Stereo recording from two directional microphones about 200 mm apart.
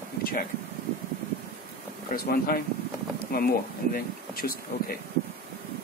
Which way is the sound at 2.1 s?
50° left (ahead or behind).